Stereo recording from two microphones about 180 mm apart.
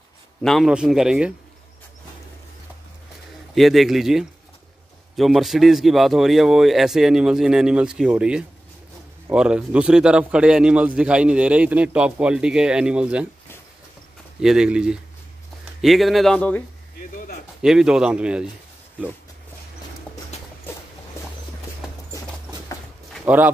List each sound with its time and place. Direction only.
0.4 s a man's voice: centre (ahead or behind)
3.5 s a man's voice: centre (ahead or behind)
14.4 s a man's voice: 5° right (ahead or behind)
17.1 s a sound: 50° left (ahead or behind)
17.6 s a man's voice: 5° right (ahead or behind)
20.7 s a sound: 10° left (ahead or behind)
23.2 s speech: 10° right (ahead or behind)